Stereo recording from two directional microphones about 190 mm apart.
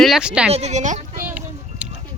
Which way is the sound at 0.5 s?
35° right (ahead or behind).